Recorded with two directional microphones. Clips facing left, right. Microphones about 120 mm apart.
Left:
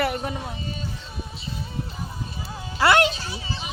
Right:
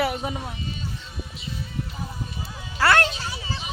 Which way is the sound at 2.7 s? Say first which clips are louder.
Left 2 dB; 15° left (ahead or behind).